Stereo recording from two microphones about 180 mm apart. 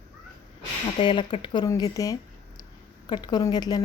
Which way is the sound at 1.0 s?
25° left (ahead or behind).